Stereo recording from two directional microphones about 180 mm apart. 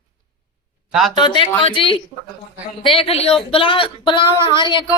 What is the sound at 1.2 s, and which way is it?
Speech, 30° left (ahead or behind).